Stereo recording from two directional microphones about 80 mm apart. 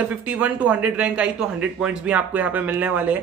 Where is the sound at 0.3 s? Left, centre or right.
Centre.